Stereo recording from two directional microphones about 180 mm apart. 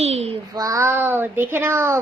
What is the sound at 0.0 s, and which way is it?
Child singing, 35° right (ahead or behind).